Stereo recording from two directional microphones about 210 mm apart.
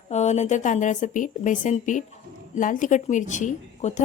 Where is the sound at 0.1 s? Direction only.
35° left (ahead or behind).